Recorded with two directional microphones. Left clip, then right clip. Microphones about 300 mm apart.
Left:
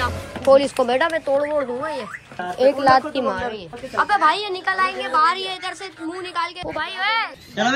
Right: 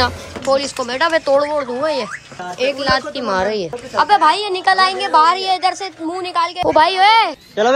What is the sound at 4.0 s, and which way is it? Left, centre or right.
A woman's voice, centre.